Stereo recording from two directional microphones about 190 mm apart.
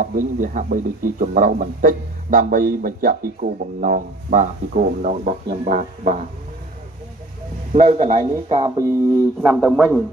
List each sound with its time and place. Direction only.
0.0 s speech: 45° right (ahead or behind)
7.7 s speech: 35° right (ahead or behind)
9.4 s a man's voice: 5° right (ahead or behind)